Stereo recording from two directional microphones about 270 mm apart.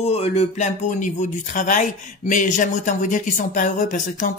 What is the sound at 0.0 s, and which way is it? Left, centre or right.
Speech, left.